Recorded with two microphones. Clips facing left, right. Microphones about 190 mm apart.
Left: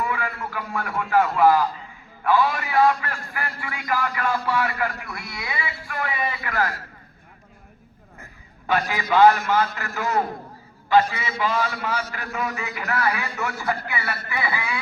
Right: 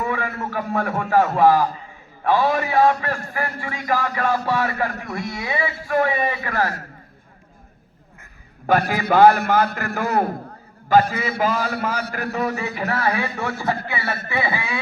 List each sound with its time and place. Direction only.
0.0 s a sound: 40° right (ahead or behind)
1.1 s a man's voice: 40° right (ahead or behind)
8.6 s a man's voice: 50° right (ahead or behind)
10.8 s a man's voice: 45° right (ahead or behind)
12.3 s a man's voice: 35° right (ahead or behind)